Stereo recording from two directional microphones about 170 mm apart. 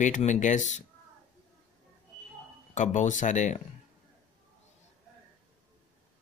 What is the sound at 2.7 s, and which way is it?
Speech, 45° left (ahead or behind).